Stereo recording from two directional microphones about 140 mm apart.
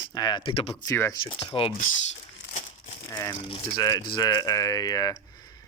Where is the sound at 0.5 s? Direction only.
45° left (ahead or behind).